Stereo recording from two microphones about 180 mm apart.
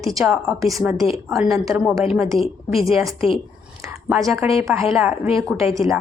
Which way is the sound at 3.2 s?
30° left (ahead or behind).